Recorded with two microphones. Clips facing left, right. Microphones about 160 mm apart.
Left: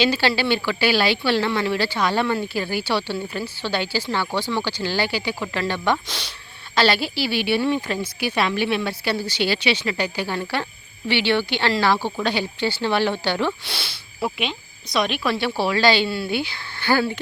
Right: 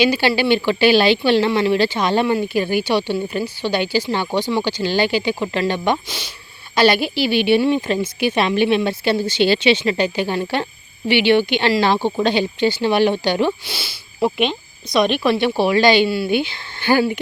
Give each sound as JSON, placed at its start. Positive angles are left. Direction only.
{"t": 0.0, "sound": "speech", "side_deg": -15}
{"t": 6.1, "sound": "speech", "side_deg": -5}
{"t": 6.7, "sound": "speech", "side_deg": -15}
{"t": 13.7, "sound": "speech", "side_deg": 0}
{"t": 14.2, "sound": "speech", "side_deg": -20}
{"t": 16.0, "sound": "speech", "side_deg": -5}
{"t": 16.3, "sound": "speech", "side_deg": -20}